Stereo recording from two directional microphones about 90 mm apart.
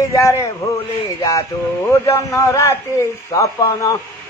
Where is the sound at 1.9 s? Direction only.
30° left (ahead or behind).